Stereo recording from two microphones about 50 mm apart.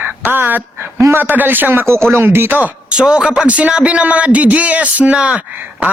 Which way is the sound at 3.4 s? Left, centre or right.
Right.